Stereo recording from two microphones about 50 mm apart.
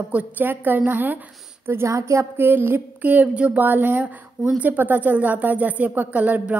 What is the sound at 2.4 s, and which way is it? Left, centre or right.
Speech, right.